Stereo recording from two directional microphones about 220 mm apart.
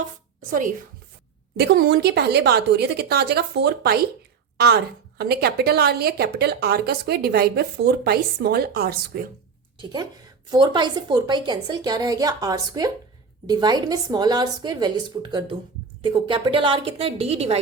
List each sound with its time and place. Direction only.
1.5 s a woman's voice: 50° right (ahead or behind)
9.7 s a woman's voice: 20° right (ahead or behind)